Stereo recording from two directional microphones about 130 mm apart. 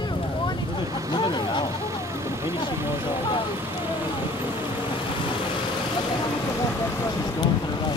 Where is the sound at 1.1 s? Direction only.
35° left (ahead or behind).